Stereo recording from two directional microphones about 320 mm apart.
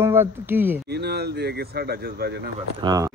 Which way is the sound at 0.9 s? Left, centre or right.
Right.